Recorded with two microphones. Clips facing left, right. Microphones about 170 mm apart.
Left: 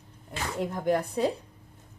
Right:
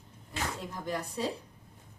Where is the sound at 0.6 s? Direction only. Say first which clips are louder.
Left 9 dB; 60° left (ahead or behind).